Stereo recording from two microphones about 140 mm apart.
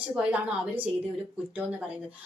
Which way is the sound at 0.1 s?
10° right (ahead or behind).